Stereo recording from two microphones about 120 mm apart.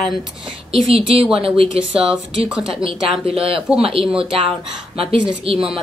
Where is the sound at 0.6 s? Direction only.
50° right (ahead or behind).